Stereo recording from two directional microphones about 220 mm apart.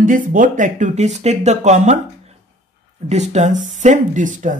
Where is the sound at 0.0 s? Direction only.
35° right (ahead or behind).